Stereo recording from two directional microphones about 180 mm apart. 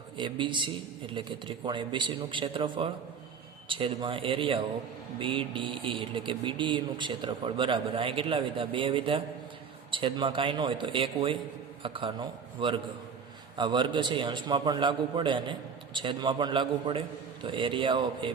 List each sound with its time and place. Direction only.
0.2 s speech: 25° right (ahead or behind)